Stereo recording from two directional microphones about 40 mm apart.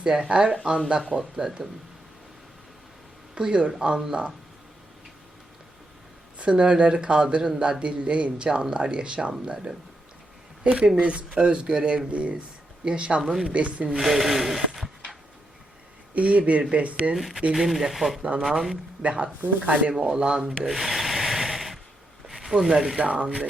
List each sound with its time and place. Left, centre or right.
0.0 s speech: right
1.1 s speech: centre
3.3 s speech: right
6.4 s speech: right
13.9 s speech: centre
16.1 s speech: right
17.2 s speech: centre
18.2 s speech: right
19.4 s speech: right
20.0 s speech: right
20.5 s rub: centre
22.3 s a sound: centre
22.6 s speech: centre
23.0 s speech: right